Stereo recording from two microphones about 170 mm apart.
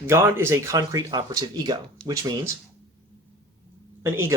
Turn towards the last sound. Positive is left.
turn(degrees=-15)  # may be behind; listen again after turning